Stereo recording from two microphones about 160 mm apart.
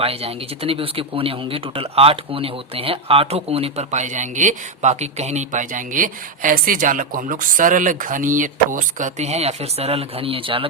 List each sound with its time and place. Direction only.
0.0 s speech: 40° right (ahead or behind)